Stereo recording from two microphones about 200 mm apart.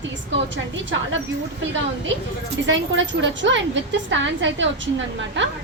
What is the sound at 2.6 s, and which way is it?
A woman's voice, 70° right (ahead or behind).